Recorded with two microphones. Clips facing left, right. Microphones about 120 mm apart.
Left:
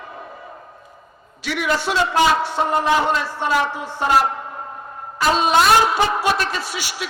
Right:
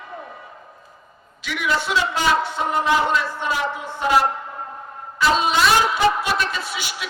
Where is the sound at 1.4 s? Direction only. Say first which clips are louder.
Left 2 dB; 35° left (ahead or behind).